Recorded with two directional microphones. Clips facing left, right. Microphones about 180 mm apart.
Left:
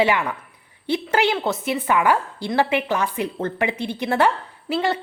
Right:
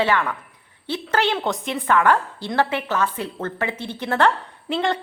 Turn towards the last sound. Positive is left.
turn(degrees=5)  # may be behind; listen again after turning